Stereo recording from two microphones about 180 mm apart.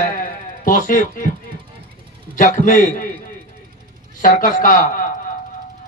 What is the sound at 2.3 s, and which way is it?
Speech, 50° left (ahead or behind).